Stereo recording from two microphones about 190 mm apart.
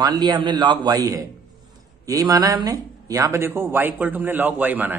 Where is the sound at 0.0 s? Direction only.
20° right (ahead or behind).